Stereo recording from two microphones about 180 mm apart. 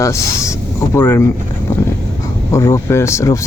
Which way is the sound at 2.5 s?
15° left (ahead or behind).